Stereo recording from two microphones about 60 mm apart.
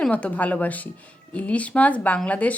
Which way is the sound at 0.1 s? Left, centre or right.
Left.